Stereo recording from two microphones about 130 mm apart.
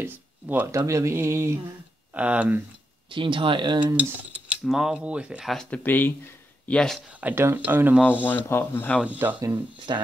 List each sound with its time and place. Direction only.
0.0 s a sound: 15° right (ahead or behind)
2.1 s speech: 10° right (ahead or behind)
3.1 s speech: 40° right (ahead or behind)
4.6 s speech: 5° right (ahead or behind)
5.9 s speech: 15° left (ahead or behind)
7.2 s speech: 15° right (ahead or behind)
8.0 s speech: 15° left (ahead or behind)
9.0 s speech: 10° right (ahead or behind)
9.9 s speech: 35° right (ahead or behind)